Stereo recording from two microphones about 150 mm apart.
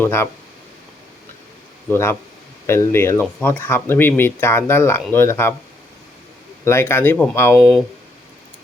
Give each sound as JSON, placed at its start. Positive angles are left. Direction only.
{"t": 0.0, "sound": "speech", "side_deg": 15}
{"t": 1.9, "sound": "speech", "side_deg": 15}
{"t": 6.7, "sound": "speech", "side_deg": 15}
{"t": 7.5, "sound": "speech", "side_deg": -5}